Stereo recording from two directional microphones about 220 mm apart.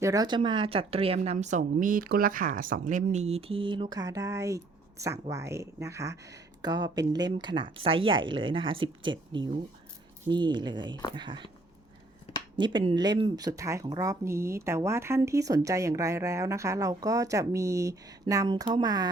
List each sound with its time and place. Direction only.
0.0 s speech: 15° right (ahead or behind)
10.2 s speech: 20° right (ahead or behind)
12.5 s speech: 20° right (ahead or behind)